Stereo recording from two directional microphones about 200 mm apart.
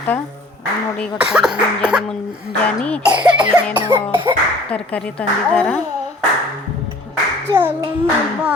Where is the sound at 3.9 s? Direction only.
25° right (ahead or behind).